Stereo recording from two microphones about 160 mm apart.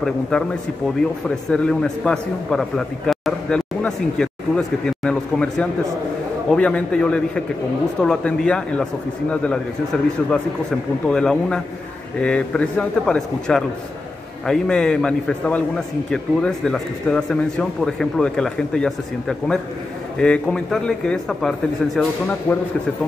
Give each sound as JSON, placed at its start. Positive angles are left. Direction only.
{"t": 1.5, "sound": "a man's voice", "side_deg": 5}
{"t": 11.1, "sound": "a man's voice", "side_deg": 5}
{"t": 22.5, "sound": "a man's voice", "side_deg": 15}